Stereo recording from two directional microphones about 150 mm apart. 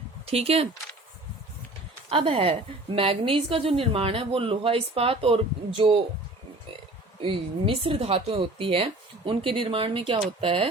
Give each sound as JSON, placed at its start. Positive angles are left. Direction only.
{"t": 0.3, "sound": "a woman's voice", "side_deg": -40}
{"t": 2.0, "sound": "a woman's voice", "side_deg": -40}
{"t": 7.2, "sound": "a woman's voice", "side_deg": -35}